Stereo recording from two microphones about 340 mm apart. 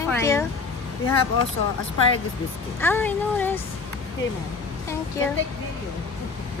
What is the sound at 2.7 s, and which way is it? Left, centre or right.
Speech, centre.